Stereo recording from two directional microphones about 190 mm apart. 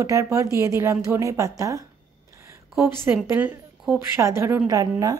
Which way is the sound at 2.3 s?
15° right (ahead or behind).